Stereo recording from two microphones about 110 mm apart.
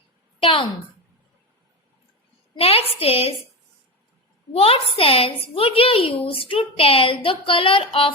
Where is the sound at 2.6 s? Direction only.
65° left (ahead or behind).